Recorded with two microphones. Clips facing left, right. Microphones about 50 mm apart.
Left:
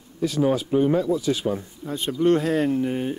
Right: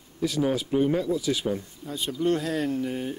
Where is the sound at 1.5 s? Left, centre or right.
Left.